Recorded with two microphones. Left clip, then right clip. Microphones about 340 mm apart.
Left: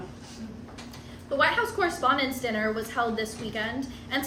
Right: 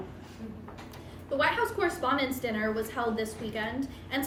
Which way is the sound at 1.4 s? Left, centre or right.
Centre.